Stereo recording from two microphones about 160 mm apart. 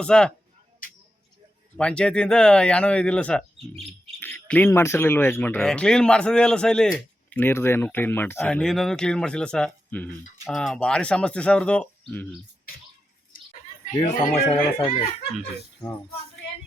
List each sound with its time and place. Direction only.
0.0 s speech: 5° left (ahead or behind)
0.8 s tick-tock: 60° left (ahead or behind)
1.7 s speech: 5° left (ahead or behind)
14.2 s speech: 55° left (ahead or behind)
14.5 s speech: 25° left (ahead or behind)